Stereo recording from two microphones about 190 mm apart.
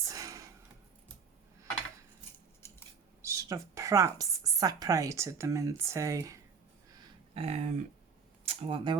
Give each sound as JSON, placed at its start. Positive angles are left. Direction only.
{"t": 0.0, "sound": "a sound", "side_deg": -20}
{"t": 3.2, "sound": "a woman's voice", "side_deg": -15}
{"t": 7.3, "sound": "speech", "side_deg": -35}